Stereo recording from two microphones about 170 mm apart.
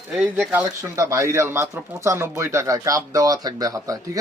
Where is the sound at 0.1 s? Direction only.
5° right (ahead or behind).